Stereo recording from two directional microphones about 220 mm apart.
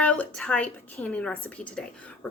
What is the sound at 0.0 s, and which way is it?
A woman's voice, 5° left (ahead or behind).